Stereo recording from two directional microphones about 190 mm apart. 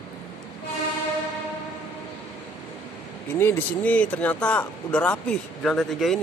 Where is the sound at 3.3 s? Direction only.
10° left (ahead or behind).